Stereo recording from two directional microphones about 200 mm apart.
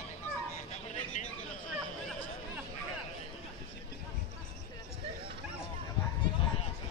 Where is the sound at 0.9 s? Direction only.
35° left (ahead or behind).